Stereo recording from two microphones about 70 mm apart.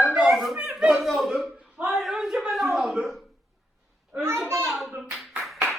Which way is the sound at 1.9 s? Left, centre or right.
Centre.